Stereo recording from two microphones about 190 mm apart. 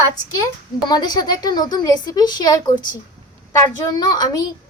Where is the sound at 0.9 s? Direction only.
20° left (ahead or behind).